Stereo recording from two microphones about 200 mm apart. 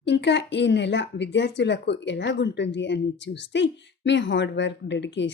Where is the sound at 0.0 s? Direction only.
60° left (ahead or behind).